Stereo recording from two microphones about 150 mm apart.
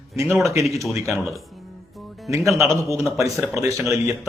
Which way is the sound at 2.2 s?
20° right (ahead or behind).